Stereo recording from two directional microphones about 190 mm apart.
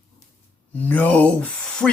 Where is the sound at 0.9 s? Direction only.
10° left (ahead or behind).